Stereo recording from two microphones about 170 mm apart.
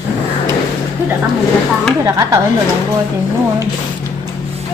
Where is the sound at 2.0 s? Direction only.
20° right (ahead or behind).